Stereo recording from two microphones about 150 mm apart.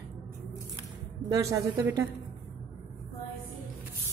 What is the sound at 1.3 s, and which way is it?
Speech, 20° right (ahead or behind).